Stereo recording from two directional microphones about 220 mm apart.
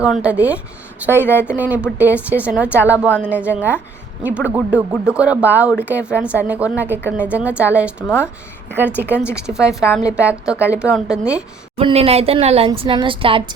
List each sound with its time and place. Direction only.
0.0 s a woman's voice: 5° right (ahead or behind)
8.0 s a woman's voice: 10° left (ahead or behind)
8.7 s a woman's voice: 10° right (ahead or behind)
11.8 s a woman's voice: 25° right (ahead or behind)